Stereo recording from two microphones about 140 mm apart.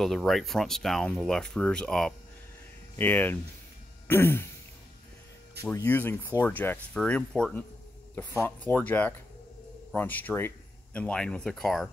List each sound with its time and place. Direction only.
0.0 s speech: centre (ahead or behind)
5.6 s speech: 20° left (ahead or behind); by 11.9 s 5° left (ahead or behind)